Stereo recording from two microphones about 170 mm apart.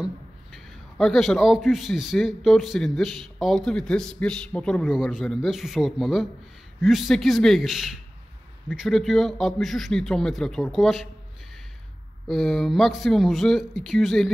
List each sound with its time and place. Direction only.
0.0 s a man's voice: centre (ahead or behind)
12.3 s a man's voice: centre (ahead or behind)